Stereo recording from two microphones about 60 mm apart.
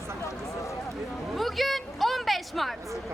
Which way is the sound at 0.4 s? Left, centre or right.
Left.